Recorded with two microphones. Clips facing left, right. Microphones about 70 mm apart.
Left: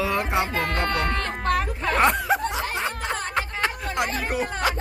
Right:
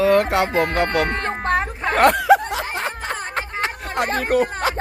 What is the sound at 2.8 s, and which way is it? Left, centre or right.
Snicker, right.